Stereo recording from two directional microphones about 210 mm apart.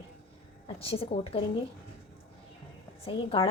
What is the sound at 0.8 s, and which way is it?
Speech, 25° left (ahead or behind).